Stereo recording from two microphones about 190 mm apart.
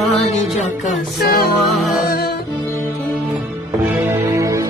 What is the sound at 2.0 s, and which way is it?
Music, 55° left (ahead or behind).